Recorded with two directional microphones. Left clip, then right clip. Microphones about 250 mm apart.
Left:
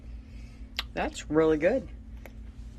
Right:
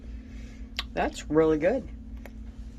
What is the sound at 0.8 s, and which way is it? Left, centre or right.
Speech, centre.